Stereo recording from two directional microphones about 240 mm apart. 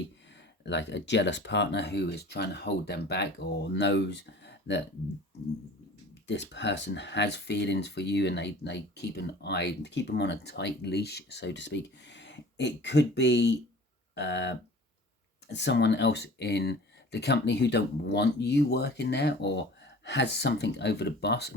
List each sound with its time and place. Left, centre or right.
0.6 s speech: left
6.2 s speech: left